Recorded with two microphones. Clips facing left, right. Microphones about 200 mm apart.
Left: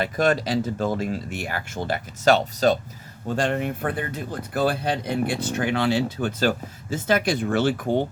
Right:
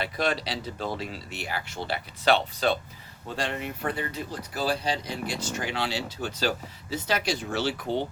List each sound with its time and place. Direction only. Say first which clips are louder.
0.0 s speech: left 6 dB; 50° left (ahead or behind)